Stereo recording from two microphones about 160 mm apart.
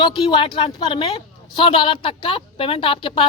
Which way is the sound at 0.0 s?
30° left (ahead or behind).